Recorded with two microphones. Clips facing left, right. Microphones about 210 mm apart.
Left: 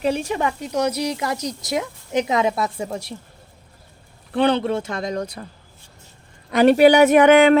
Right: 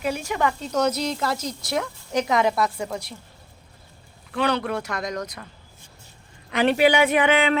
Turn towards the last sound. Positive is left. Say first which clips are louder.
# left 8 dB
turn(degrees=50)  # may be behind; listen again after turning